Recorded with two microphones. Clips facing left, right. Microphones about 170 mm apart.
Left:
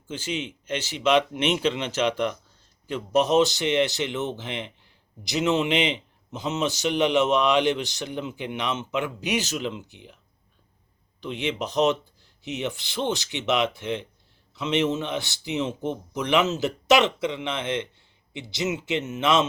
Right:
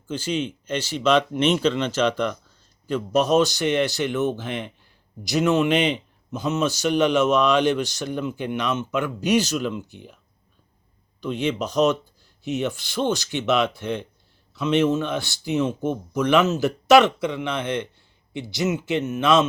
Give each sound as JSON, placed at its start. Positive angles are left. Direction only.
{"t": 0.1, "sound": "a man's voice", "side_deg": 20}
{"t": 11.2, "sound": "a man's voice", "side_deg": 20}